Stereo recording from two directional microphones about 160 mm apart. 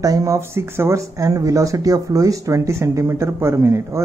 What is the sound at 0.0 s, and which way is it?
Speech, 20° right (ahead or behind).